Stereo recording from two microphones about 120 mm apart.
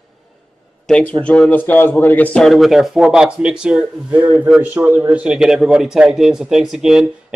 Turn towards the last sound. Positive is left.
turn(degrees=-5)  # may be behind; listen again after turning